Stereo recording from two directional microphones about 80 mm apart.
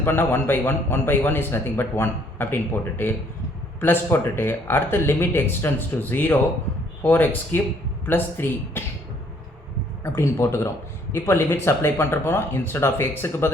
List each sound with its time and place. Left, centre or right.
0.0 s speech: left
3.8 s speech: left
10.0 s speech: left